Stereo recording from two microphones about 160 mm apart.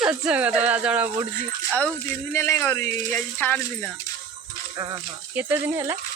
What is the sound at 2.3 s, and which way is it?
Speech, 15° left (ahead or behind).